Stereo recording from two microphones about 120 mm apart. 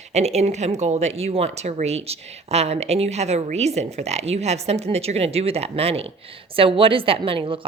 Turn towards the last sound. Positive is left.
turn(degrees=-45)  # may be behind; listen again after turning